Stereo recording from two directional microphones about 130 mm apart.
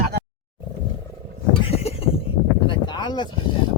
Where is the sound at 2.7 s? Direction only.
35° left (ahead or behind).